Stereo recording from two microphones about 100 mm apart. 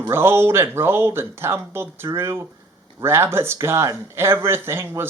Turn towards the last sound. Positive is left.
turn(degrees=-25)  # may be behind; listen again after turning